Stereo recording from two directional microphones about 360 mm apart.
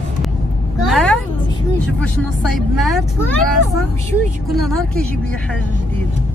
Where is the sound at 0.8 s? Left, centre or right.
Centre.